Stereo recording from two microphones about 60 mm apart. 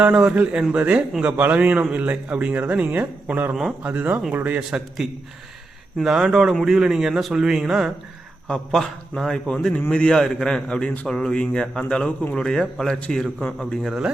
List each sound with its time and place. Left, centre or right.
0.1 s a man's voice: centre
3.5 s speech: centre
3.8 s a man's voice: right
5.0 s speech: centre
6.5 s a man's voice: centre
6.7 s speech: centre
8.4 s a man's voice: centre